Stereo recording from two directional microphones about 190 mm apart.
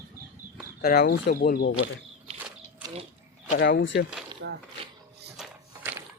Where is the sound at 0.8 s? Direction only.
55° left (ahead or behind).